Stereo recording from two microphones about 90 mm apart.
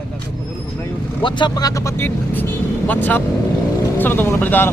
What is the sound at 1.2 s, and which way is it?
Speech, 50° left (ahead or behind).